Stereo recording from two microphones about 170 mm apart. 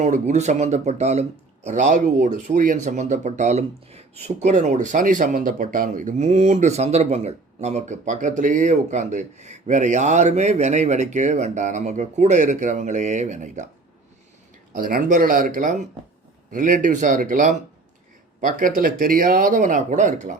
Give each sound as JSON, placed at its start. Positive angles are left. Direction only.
{"t": 0.0, "sound": "speech", "side_deg": -40}
{"t": 14.8, "sound": "speech", "side_deg": -55}